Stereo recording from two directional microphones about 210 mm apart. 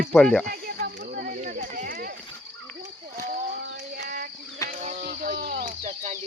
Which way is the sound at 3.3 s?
40° right (ahead or behind).